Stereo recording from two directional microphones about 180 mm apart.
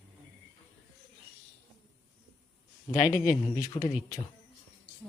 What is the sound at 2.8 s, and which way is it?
Speech, 20° left (ahead or behind).